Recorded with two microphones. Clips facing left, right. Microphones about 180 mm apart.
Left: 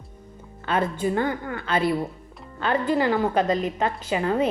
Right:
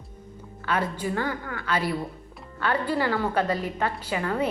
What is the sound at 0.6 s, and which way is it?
A woman's voice, 25° left (ahead or behind).